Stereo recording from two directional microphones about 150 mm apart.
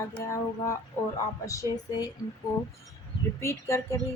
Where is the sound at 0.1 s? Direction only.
20° left (ahead or behind).